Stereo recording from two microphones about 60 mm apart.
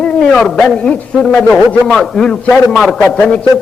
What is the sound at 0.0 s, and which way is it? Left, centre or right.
A man's voice, centre.